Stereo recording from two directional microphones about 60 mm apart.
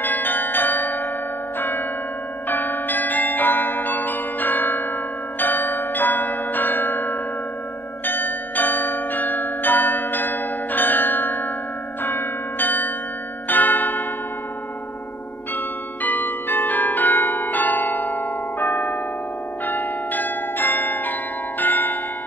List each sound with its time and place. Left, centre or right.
0.0 s change ringing: left
1.6 s church bell: left
2.4 s change ringing: left
13.5 s bell: left
15.5 s change ringing: left